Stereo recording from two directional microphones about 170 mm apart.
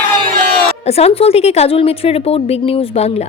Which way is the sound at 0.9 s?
35° left (ahead or behind).